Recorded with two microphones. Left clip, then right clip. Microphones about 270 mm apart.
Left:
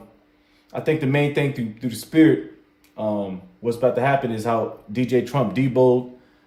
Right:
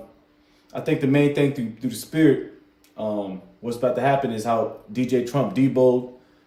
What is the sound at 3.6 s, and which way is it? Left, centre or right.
Speech, left.